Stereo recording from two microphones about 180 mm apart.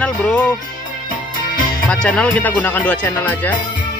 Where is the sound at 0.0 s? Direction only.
5° left (ahead or behind).